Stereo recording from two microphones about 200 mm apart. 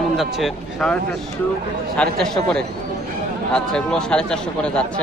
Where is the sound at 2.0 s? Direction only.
5° left (ahead or behind).